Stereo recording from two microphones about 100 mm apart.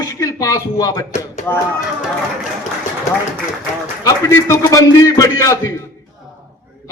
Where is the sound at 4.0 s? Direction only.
30° left (ahead or behind).